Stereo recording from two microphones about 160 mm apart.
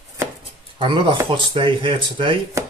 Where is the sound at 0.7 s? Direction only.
30° right (ahead or behind).